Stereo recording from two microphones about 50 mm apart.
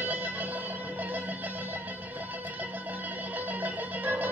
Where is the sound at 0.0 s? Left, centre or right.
Right.